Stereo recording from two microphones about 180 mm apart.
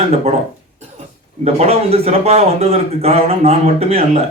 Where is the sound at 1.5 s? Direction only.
35° right (ahead or behind).